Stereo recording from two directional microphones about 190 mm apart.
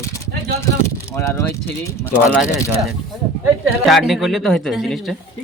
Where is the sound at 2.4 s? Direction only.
Centre (ahead or behind).